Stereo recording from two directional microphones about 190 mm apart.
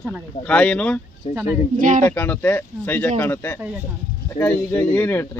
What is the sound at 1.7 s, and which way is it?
Speech, 45° right (ahead or behind).